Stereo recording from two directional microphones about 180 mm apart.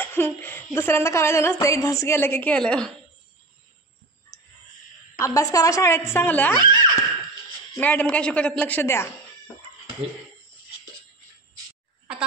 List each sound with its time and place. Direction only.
0.0 s speech: 10° left (ahead or behind)
5.2 s speech: 20° left (ahead or behind)
6.6 s speech: 25° right (ahead or behind)
7.7 s speech: 10° left (ahead or behind)